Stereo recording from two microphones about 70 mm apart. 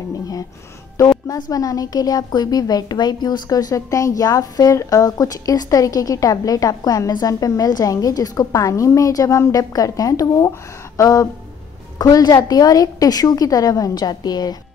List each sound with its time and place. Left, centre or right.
1.2 s a woman's voice: left
12.0 s a woman's voice: left